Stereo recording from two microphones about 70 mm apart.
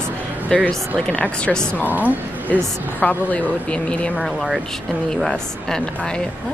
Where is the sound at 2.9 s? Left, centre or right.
Centre.